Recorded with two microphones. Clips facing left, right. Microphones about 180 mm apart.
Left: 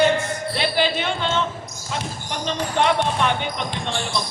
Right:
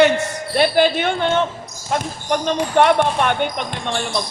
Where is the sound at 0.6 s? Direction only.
50° right (ahead or behind).